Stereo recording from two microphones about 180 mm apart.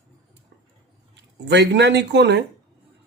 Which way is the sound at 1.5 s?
70° right (ahead or behind).